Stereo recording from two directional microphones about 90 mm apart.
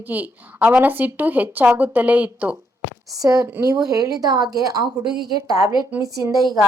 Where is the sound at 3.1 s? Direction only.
40° right (ahead or behind).